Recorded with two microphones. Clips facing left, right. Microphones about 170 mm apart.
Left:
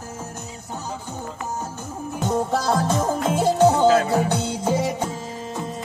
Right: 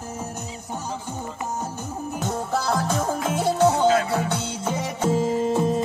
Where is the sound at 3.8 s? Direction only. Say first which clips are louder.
Left 3 dB; 40° left (ahead or behind).